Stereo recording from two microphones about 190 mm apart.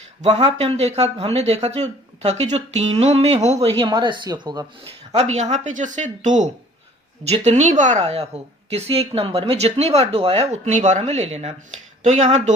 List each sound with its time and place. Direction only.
0.2 s speech: 35° right (ahead or behind)
3.8 s speech: 25° right (ahead or behind)
5.1 s speech: 35° right (ahead or behind)